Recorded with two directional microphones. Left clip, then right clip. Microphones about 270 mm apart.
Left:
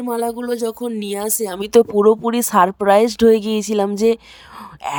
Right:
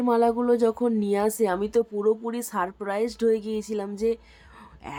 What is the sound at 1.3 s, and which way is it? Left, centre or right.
Speech, left.